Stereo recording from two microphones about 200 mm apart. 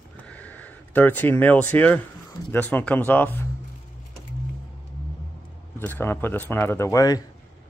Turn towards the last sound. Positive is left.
turn(degrees=15)  # may be behind; listen again after turning